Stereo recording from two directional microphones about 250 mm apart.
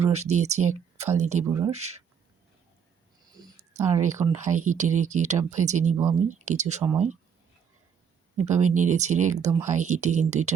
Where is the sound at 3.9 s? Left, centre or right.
Right.